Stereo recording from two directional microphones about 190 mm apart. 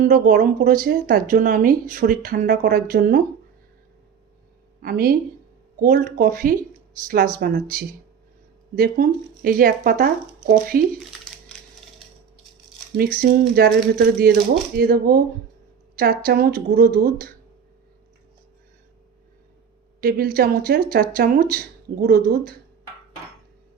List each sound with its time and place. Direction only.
0.0 s speech: 45° right (ahead or behind)
4.8 s speech: 50° right (ahead or behind)
11.5 s a sound: 5° left (ahead or behind)
13.0 s speech: 50° right (ahead or behind)
20.0 s speech: 50° right (ahead or behind)